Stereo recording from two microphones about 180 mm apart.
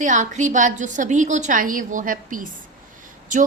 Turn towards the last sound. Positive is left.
turn(degrees=-45)  # may be behind; listen again after turning